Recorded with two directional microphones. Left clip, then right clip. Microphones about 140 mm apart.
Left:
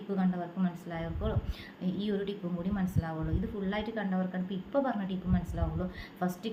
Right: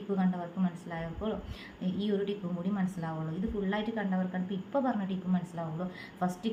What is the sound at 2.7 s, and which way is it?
A woman's voice, 25° left (ahead or behind).